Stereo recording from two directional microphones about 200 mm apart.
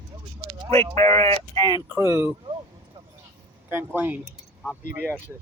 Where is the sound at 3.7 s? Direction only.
10° right (ahead or behind).